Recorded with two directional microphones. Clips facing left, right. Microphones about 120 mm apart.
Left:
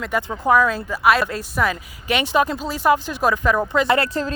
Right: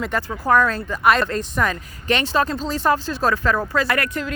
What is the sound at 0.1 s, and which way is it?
Speech, 15° left (ahead or behind).